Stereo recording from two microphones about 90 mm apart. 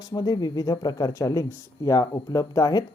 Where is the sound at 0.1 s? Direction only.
50° left (ahead or behind).